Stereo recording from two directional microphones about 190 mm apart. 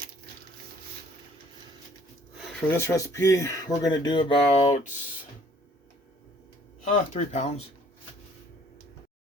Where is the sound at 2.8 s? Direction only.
15° left (ahead or behind); by 4.8 s 30° left (ahead or behind).